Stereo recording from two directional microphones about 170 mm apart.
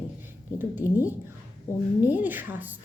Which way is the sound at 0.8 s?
20° left (ahead or behind).